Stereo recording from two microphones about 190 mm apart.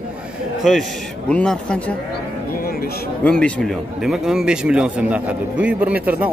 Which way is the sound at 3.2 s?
5° left (ahead or behind).